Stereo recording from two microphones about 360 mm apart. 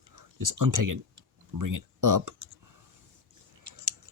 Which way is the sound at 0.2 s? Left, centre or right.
Right.